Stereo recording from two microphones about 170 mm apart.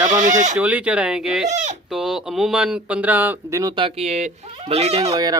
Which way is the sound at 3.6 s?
30° right (ahead or behind).